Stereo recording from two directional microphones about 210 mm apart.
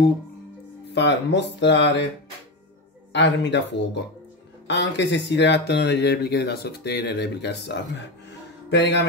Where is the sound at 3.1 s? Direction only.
55° left (ahead or behind).